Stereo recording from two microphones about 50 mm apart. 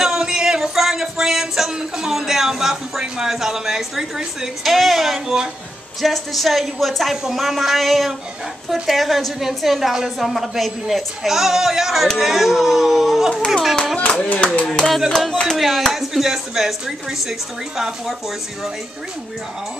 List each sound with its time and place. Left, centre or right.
0.0 s music: centre
4.6 s a woman's voice: centre
13.9 s speech: left
14.9 s a woman's voice: centre